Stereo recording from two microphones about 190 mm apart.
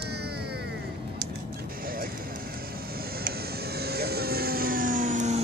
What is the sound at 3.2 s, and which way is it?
Vehicle, 55° right (ahead or behind).